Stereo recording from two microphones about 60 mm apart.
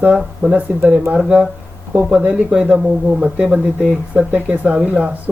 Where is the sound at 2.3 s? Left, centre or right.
Centre.